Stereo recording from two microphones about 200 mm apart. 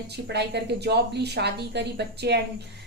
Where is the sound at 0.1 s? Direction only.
55° right (ahead or behind).